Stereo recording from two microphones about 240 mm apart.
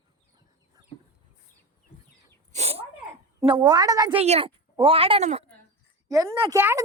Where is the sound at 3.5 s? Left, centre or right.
Centre.